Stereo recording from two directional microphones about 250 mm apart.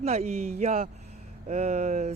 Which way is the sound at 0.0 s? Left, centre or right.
Right.